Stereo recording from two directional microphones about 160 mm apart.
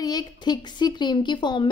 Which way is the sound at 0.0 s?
25° left (ahead or behind).